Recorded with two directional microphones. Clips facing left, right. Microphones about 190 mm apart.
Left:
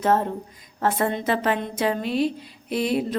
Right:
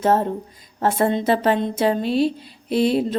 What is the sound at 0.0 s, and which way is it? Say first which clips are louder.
A woman's voice: right 3 dB; 30° right (ahead or behind).